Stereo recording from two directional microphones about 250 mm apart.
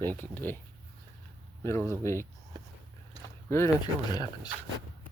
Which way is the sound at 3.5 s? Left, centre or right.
Centre.